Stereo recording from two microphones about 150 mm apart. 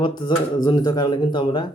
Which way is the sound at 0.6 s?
25° left (ahead or behind).